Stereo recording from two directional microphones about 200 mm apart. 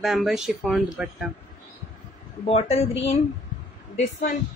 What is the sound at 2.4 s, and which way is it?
A woman's voice, 30° left (ahead or behind).